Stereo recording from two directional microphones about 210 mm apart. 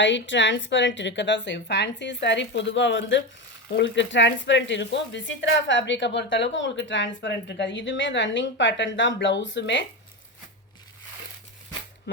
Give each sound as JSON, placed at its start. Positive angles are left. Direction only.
{"t": 0.0, "sound": "speech", "side_deg": 60}